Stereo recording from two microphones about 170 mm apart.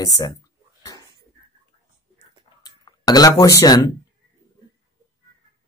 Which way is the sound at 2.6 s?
20° left (ahead or behind).